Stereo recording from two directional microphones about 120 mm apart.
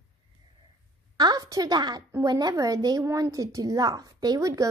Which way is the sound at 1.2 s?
35° right (ahead or behind).